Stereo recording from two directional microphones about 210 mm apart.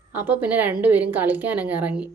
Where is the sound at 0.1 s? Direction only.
10° right (ahead or behind).